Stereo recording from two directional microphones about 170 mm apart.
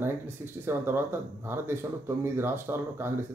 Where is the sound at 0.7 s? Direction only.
15° right (ahead or behind).